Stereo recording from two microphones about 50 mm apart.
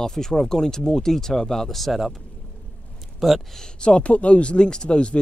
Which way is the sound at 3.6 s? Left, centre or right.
Centre.